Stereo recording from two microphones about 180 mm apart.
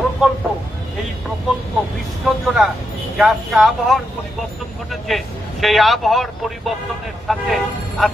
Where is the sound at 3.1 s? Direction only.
Centre (ahead or behind).